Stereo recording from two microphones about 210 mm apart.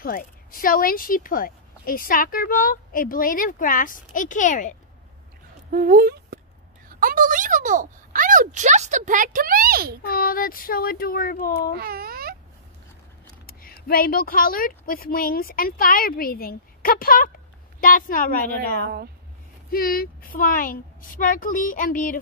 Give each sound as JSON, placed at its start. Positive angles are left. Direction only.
{"t": 0.0, "sound": "speech", "side_deg": 40}
{"t": 5.7, "sound": "speech", "side_deg": -40}
{"t": 10.0, "sound": "a woman's voice", "side_deg": 45}
{"t": 11.7, "sound": "a child's voice", "side_deg": -45}
{"t": 13.5, "sound": "a sound", "side_deg": 45}
{"t": 13.8, "sound": "a woman's voice", "side_deg": 45}
{"t": 18.6, "sound": "a woman's voice", "side_deg": -50}
{"t": 19.7, "sound": "speech", "side_deg": 45}